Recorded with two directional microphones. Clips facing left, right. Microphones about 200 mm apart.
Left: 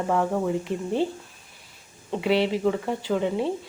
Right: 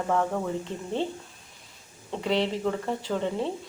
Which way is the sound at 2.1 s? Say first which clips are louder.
Left 4 dB; 5° left (ahead or behind).